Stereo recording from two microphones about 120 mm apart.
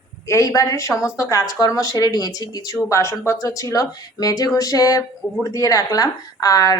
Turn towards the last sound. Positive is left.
turn(degrees=30)  # may be behind; listen again after turning